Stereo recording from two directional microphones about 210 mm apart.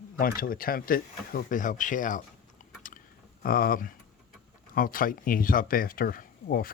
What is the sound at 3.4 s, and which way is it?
Speech, 45° left (ahead or behind).